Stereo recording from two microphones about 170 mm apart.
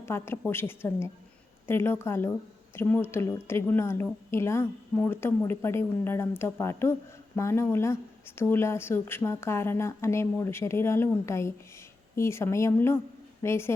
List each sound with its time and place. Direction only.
0.0 s a woman's voice: 15° left (ahead or behind)